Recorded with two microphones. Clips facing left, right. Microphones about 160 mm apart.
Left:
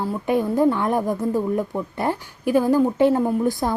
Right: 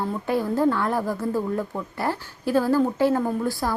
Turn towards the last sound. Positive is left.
turn(degrees=20)  # may be behind; listen again after turning